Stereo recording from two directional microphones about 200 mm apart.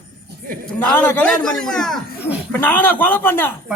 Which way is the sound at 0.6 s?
10° left (ahead or behind).